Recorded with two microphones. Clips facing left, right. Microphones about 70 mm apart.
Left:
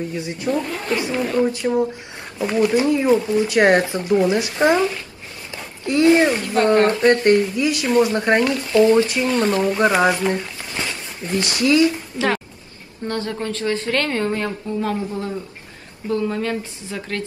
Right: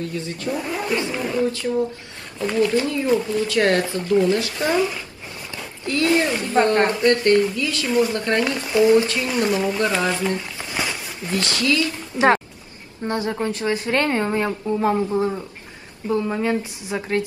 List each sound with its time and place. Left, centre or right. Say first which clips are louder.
0.1 s speech: left 2 dB; centre
0.5 s speech: left 3 dB; centre
1.1 s speech: left 3 dB; centre
1.4 s speech: left 2 dB; left
5.5 s a sound: left 3 dB; left
6.4 s speech: even; right
7.0 s speech: left 2 dB; left
8.5 s speech: left 2 dB; centre
8.9 s speech: left 1 dB; left
9.3 s speech: right 1 dB; centre
9.8 s speech: left 5 dB; centre
10.7 s a sound: right 2 dB; centre
11.3 s speech: left 4 dB; left
13.0 s speech: right 1 dB; right